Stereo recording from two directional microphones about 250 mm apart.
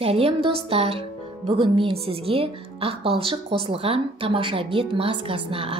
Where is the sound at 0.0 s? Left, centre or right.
Right.